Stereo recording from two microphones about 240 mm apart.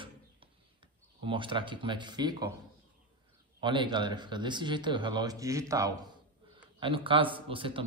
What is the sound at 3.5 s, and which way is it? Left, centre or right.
A man's voice, centre.